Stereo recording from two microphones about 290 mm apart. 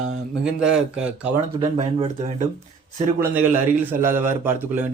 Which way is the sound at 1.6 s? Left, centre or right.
Right.